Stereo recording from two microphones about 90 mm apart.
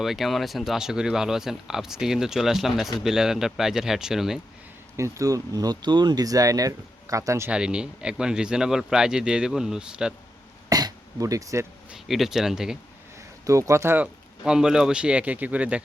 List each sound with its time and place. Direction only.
0.0 s speech: centre (ahead or behind)
4.9 s speech: 35° right (ahead or behind)
7.5 s speech: 10° right (ahead or behind)
10.7 s throat clearing: 45° right (ahead or behind)
11.9 s speech: 5° right (ahead or behind)
13.4 s speech: 35° right (ahead or behind)
14.0 s speech: 10° right (ahead or behind)